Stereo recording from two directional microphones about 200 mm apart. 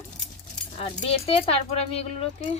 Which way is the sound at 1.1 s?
30° left (ahead or behind).